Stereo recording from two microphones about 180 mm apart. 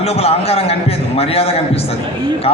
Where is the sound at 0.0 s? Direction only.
35° left (ahead or behind).